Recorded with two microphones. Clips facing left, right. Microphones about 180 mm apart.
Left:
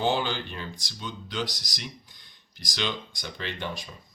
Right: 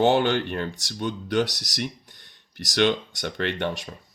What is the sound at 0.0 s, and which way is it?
Speech, 65° right (ahead or behind).